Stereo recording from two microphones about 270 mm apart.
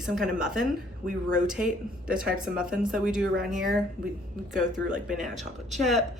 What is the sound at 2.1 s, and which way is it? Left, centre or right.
Speech, centre.